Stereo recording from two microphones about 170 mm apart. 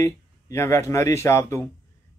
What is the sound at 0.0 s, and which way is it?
Speech, 15° left (ahead or behind).